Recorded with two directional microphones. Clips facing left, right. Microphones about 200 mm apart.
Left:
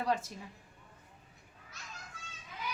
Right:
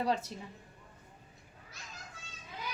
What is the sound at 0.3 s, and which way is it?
Speech, 25° right (ahead or behind).